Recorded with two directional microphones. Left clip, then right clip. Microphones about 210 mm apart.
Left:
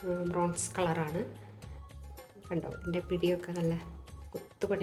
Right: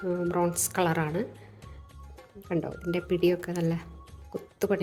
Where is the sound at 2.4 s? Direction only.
45° right (ahead or behind).